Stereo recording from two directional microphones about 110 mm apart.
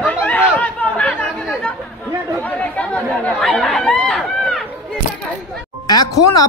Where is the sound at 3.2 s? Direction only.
5° left (ahead or behind).